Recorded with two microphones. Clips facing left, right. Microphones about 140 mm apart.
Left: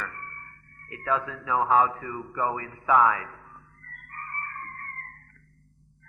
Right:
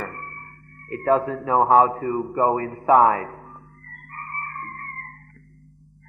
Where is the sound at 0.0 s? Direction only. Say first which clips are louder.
Right 5 dB; 45° right (ahead or behind).